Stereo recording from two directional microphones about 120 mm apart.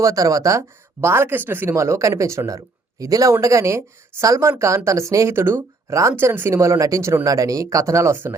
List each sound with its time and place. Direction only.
0.0 s speech: 30° right (ahead or behind)